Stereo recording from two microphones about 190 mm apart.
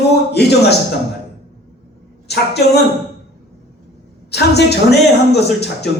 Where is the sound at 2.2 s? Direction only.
60° left (ahead or behind).